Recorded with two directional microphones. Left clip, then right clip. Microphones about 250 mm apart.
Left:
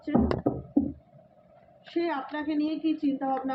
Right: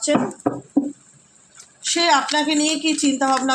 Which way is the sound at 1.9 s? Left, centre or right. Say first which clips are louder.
Right 13 dB; right.